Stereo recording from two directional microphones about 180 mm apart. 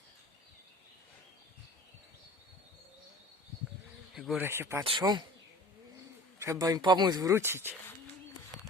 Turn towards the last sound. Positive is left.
turn(degrees=-15)  # may be behind; listen again after turning